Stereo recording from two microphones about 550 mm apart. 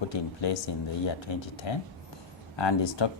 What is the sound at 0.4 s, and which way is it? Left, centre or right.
Speech, left.